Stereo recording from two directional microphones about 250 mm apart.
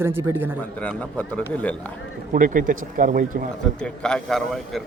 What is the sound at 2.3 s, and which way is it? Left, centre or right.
Speech, right.